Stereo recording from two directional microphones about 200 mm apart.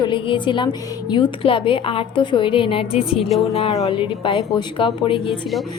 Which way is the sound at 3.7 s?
20° left (ahead or behind).